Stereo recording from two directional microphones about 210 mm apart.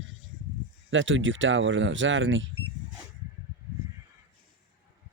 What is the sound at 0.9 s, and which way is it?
Speech, 65° right (ahead or behind).